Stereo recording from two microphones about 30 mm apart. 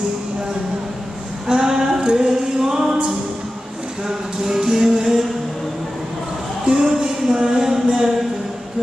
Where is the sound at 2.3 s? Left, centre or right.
Centre.